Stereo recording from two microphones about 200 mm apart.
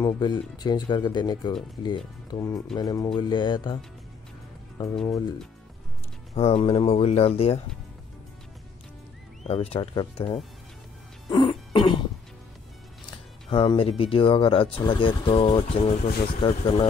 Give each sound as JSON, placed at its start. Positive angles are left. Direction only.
{"t": 0.0, "sound": "speech", "side_deg": 20}
{"t": 6.3, "sound": "speech", "side_deg": 30}
{"t": 9.4, "sound": "speech", "side_deg": 30}
{"t": 11.2, "sound": "music", "side_deg": 20}
{"t": 13.5, "sound": "speech", "side_deg": 25}